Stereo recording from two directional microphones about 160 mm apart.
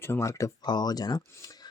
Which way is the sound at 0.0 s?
15° left (ahead or behind).